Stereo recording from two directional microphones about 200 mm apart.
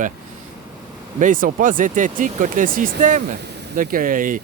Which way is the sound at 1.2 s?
40° right (ahead or behind).